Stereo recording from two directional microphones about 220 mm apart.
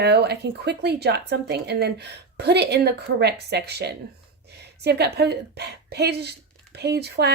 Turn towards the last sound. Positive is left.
turn(degrees=-45)  # may be behind; listen again after turning